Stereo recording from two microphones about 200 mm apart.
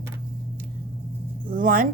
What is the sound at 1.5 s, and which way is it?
Speech, 45° right (ahead or behind).